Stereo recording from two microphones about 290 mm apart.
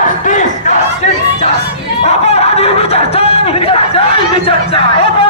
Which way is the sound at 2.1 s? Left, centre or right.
Left.